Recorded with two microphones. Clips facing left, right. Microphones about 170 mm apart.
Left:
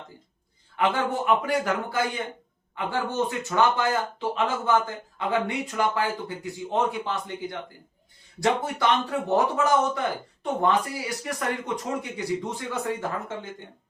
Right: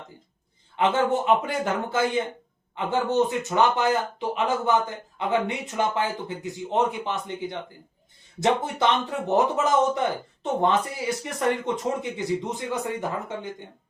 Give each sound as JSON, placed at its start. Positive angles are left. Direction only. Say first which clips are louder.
{"t": 0.8, "sound": "speech", "louder": "right 3 dB", "side_deg": -20}